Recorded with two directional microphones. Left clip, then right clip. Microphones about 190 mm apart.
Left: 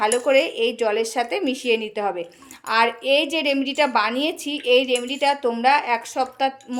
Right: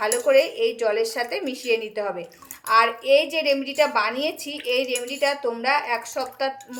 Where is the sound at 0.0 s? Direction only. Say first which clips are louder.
Left 1 dB; 40° left (ahead or behind).